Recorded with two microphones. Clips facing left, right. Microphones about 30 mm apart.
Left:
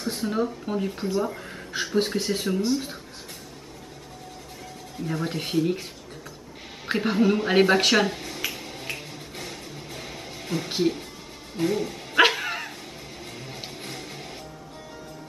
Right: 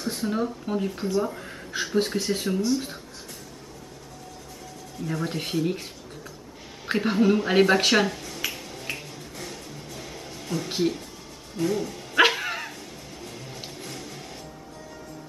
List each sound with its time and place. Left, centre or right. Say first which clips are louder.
0.0 s speech: left 1 dB; centre
5.0 s speech: even; centre
6.9 s speech: right 1 dB; centre
8.1 s speech: left 2 dB; left
8.4 s finger snapping: even; centre
9.4 s music: left 1 dB; left
11.6 s speech: left 1 dB; left
12.2 s dog: left 1 dB; centre
12.7 s crow: left 1 dB; left
13.7 s music: left 1 dB; left